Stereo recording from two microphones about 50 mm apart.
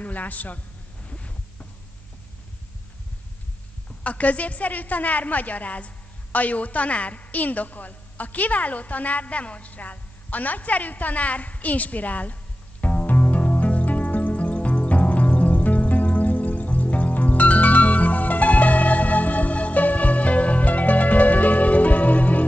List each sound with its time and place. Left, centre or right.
0.0 s a woman's voice: left
1.0 s heart sounds: left
4.0 s a woman's voice: left
12.8 s music: left